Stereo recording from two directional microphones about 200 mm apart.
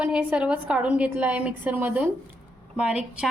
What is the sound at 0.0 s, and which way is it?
A woman's voice, 5° right (ahead or behind).